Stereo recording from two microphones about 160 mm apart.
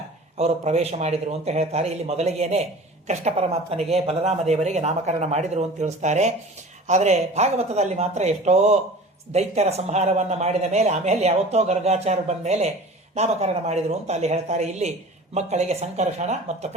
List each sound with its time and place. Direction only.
0.3 s a man's voice: 40° right (ahead or behind)